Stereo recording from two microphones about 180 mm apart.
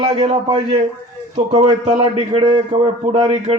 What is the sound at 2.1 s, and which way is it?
A man's voice, 25° right (ahead or behind).